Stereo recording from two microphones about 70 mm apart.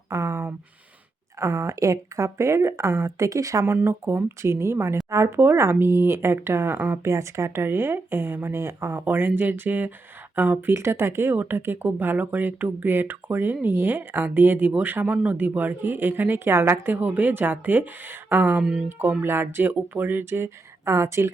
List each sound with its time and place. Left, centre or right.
0.1 s a sound: right
1.4 s speech: right
3.7 s speech: right
7.0 s speech: right
18.6 s speech: centre
18.9 s speech: right